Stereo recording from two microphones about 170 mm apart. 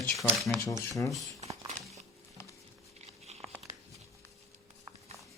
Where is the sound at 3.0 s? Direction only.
40° right (ahead or behind).